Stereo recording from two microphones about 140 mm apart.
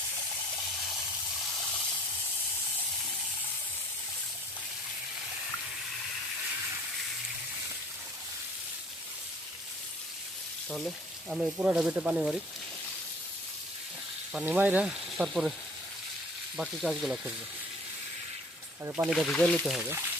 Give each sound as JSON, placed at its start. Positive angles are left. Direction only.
{"t": 10.7, "sound": "speech", "side_deg": -5}
{"t": 14.3, "sound": "speech", "side_deg": -10}
{"t": 16.6, "sound": "speech", "side_deg": 0}
{"t": 19.0, "sound": "speech", "side_deg": 0}